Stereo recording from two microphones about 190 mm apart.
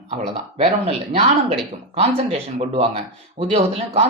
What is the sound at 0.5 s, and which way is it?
Speech, 30° right (ahead or behind).